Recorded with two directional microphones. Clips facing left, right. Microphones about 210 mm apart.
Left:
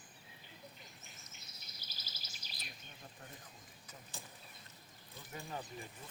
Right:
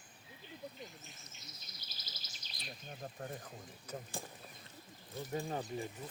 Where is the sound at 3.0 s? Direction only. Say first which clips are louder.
Right 10 dB; 45° right (ahead or behind).